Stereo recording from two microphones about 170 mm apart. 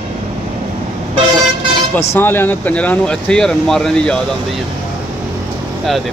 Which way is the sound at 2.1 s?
10° left (ahead or behind).